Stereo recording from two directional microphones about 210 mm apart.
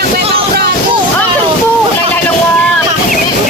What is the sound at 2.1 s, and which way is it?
Boat, 5° left (ahead or behind).